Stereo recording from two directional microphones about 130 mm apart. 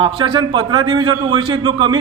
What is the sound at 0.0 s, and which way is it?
A man's voice, 40° right (ahead or behind).